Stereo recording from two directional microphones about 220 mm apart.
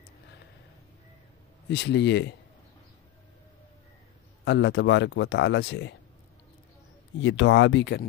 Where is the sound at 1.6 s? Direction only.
50° left (ahead or behind).